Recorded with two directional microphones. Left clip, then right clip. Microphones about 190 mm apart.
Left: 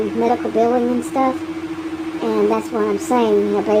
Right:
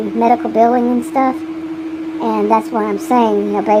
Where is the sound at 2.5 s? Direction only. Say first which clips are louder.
Right 4 dB; 30° right (ahead or behind).